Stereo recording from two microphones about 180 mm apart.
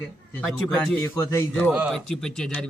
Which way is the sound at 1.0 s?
15° left (ahead or behind).